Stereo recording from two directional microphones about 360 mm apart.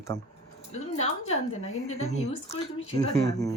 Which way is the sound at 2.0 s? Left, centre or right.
Centre.